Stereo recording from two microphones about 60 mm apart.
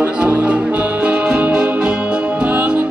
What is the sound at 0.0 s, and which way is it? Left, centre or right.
Music, right.